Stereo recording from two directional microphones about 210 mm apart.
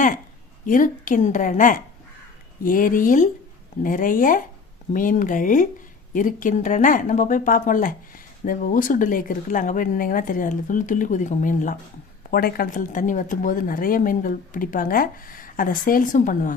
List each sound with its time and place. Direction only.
0.6 s a woman's voice: 40° left (ahead or behind)